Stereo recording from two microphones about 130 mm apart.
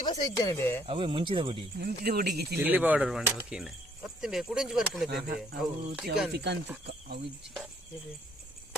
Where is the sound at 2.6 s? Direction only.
10° right (ahead or behind).